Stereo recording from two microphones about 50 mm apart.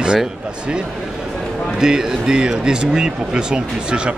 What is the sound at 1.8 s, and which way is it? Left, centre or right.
Speech, centre.